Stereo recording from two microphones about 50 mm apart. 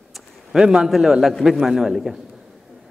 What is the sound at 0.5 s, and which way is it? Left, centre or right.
A man's voice, centre.